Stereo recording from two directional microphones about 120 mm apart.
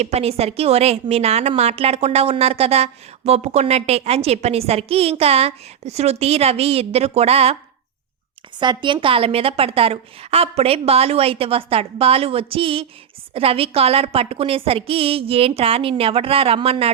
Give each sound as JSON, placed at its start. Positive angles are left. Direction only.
{"t": 0.0, "sound": "a woman's voice", "side_deg": -60}
{"t": 8.5, "sound": "a woman's voice", "side_deg": -40}